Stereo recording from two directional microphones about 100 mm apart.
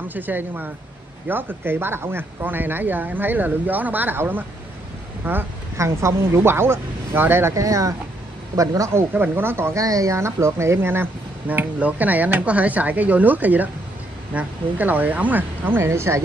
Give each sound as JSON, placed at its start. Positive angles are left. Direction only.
{"t": 0.1, "sound": "speech", "side_deg": -20}
{"t": 9.1, "sound": "speech", "side_deg": -20}
{"t": 9.8, "sound": "speech", "side_deg": -35}